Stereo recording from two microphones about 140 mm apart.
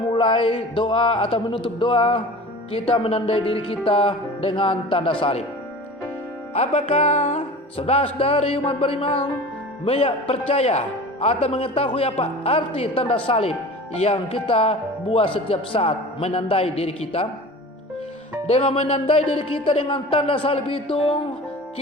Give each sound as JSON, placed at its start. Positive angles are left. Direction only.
{"t": 0.1, "sound": "speech", "side_deg": 35}
{"t": 6.5, "sound": "speech", "side_deg": 50}
{"t": 7.3, "sound": "speech", "side_deg": 45}
{"t": 18.4, "sound": "speech", "side_deg": 45}